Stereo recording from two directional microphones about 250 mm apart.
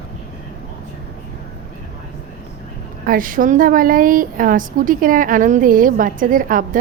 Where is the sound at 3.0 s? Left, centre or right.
Right.